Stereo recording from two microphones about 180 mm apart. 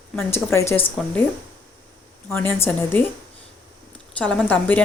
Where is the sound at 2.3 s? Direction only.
15° left (ahead or behind).